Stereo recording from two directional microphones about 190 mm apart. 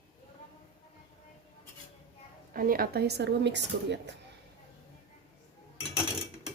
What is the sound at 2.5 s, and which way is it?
A woman's voice, 50° right (ahead or behind).